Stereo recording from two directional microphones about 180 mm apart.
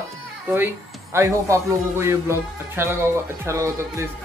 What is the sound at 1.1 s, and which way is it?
Speech, 15° right (ahead or behind).